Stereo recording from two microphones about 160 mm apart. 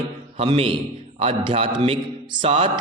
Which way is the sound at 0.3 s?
35° right (ahead or behind).